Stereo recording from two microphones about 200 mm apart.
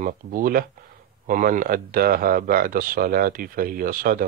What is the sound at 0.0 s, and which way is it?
Speech, 45° right (ahead or behind).